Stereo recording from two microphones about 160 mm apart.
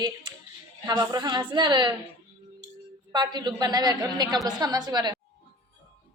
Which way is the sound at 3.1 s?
25° right (ahead or behind).